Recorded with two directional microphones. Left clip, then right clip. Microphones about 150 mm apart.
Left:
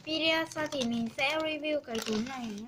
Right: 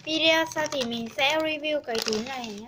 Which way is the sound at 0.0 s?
45° right (ahead or behind).